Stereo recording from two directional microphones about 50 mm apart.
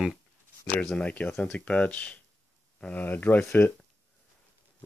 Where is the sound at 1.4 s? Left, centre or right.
Left.